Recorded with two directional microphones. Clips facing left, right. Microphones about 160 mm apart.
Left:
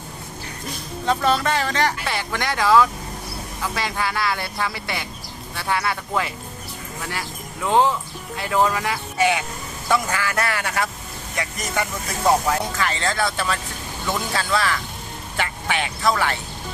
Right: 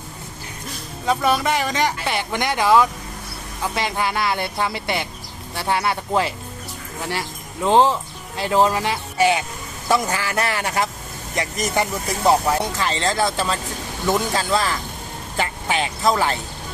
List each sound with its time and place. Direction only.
1.0 s speech: 10° right (ahead or behind); by 6.3 s 30° right (ahead or behind)
7.6 s speech: 30° right (ahead or behind)